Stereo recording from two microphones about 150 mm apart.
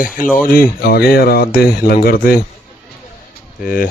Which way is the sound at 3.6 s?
70° left (ahead or behind).